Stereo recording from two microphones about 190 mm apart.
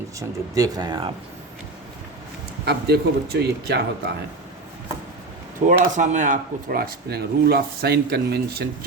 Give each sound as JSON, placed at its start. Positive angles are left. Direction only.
{"t": 0.2, "sound": "speech", "side_deg": -20}
{"t": 2.6, "sound": "a man's voice", "side_deg": -60}
{"t": 5.6, "sound": "speech", "side_deg": -40}